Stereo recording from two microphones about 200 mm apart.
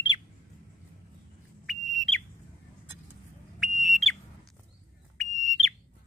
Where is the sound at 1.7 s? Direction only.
5° left (ahead or behind).